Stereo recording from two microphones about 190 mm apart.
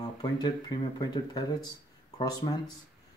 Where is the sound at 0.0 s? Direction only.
20° left (ahead or behind).